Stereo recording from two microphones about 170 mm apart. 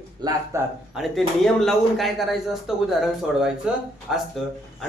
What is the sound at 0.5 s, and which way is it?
Speech, 15° right (ahead or behind).